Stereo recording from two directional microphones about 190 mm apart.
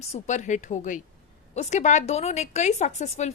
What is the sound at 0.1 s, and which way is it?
A woman's voice, 40° left (ahead or behind).